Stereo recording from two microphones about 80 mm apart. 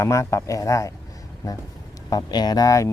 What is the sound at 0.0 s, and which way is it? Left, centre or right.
Speech, left.